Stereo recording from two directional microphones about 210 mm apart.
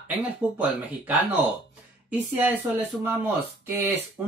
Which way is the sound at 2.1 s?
10° right (ahead or behind).